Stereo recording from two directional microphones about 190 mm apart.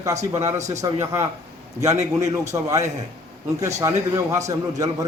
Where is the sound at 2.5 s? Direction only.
15° right (ahead or behind).